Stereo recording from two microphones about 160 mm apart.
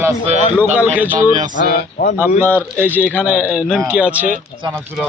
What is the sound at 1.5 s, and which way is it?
Speech, 55° left (ahead or behind).